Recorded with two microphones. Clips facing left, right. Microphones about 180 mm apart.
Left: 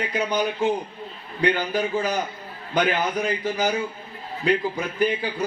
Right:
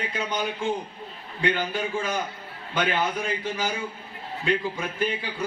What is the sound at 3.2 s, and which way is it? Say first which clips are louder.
Speech: left 5 dB; 40° left (ahead or behind).